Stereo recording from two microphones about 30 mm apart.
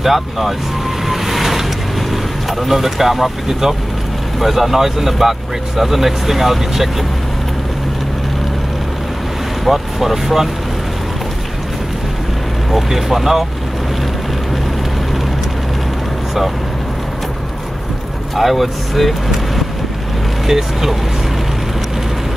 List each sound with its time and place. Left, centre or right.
0.0 s speech: centre
1.0 s vehicle: centre
2.6 s speech: centre
9.7 s speech: centre
12.7 s speech: centre
18.3 s speech: centre
20.4 s speech: centre